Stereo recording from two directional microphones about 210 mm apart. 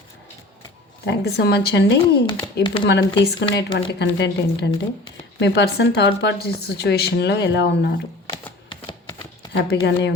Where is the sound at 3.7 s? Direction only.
55° left (ahead or behind).